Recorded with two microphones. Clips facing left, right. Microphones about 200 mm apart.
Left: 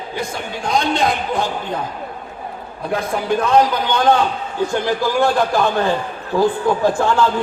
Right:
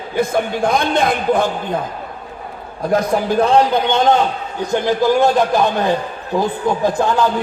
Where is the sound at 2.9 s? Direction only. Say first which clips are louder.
Right 4 dB; 35° right (ahead or behind); by 7.3 s 15° right (ahead or behind).